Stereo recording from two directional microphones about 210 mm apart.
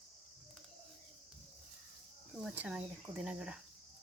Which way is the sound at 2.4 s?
5° right (ahead or behind).